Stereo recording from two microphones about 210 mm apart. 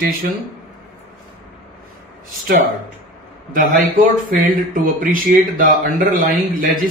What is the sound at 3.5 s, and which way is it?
Speech, 40° right (ahead or behind).